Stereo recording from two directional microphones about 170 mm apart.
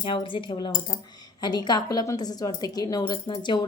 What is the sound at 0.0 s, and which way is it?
Speech, 30° left (ahead or behind).